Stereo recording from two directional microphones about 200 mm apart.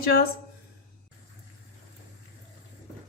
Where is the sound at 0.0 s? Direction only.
50° left (ahead or behind).